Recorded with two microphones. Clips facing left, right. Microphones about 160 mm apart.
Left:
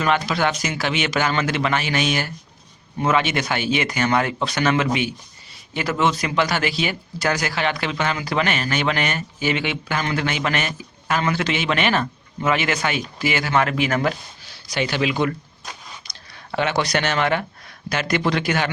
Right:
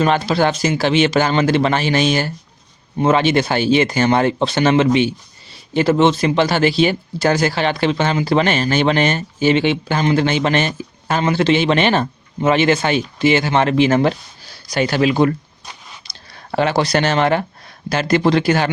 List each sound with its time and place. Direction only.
0.0 s speech: 30° right (ahead or behind)